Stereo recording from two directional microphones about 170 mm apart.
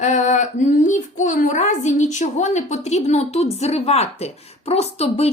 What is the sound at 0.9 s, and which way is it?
A woman's voice, 45° left (ahead or behind).